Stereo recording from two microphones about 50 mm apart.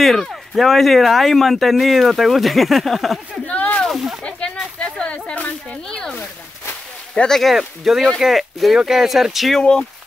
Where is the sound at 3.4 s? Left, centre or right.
Left.